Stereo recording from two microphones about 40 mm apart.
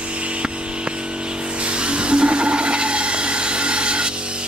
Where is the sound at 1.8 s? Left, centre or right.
Right.